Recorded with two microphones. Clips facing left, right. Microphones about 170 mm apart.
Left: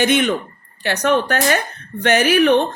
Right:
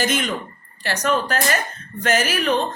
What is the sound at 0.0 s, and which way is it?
Speech, 60° left (ahead or behind).